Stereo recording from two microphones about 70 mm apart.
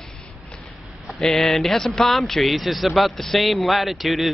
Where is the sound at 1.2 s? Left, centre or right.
Centre.